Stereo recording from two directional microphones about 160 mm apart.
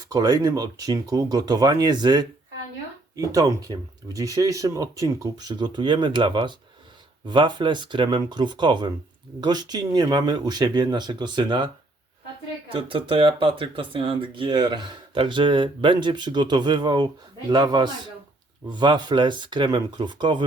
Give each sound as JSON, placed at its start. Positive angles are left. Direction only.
{"t": 0.1, "sound": "speech", "side_deg": -25}